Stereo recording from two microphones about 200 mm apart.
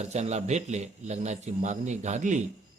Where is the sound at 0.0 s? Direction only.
35° right (ahead or behind).